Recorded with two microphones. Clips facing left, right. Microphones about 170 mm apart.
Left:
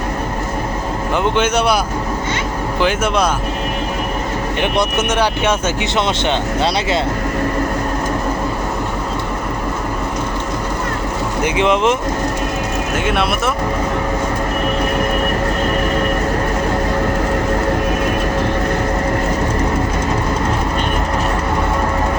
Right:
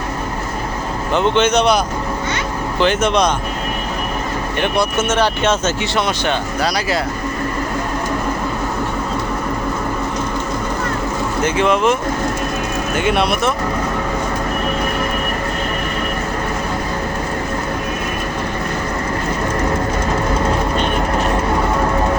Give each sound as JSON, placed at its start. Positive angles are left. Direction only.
{"t": 1.1, "sound": "speech", "side_deg": 10}
{"t": 2.8, "sound": "speech", "side_deg": 10}
{"t": 4.6, "sound": "speech", "side_deg": 15}
{"t": 6.2, "sound": "speech", "side_deg": 25}
{"t": 11.4, "sound": "speech", "side_deg": 20}
{"t": 13.1, "sound": "speech", "side_deg": 0}